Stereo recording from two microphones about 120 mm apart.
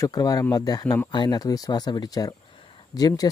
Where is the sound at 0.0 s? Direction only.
35° left (ahead or behind).